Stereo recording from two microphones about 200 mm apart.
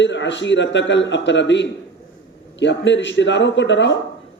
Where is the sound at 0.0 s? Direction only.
65° left (ahead or behind).